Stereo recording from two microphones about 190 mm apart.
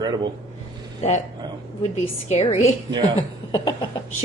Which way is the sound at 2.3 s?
35° left (ahead or behind).